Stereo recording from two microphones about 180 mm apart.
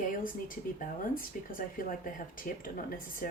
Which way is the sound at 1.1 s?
50° left (ahead or behind).